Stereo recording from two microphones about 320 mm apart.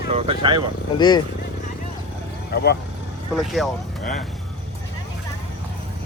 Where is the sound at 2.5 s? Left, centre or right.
Left.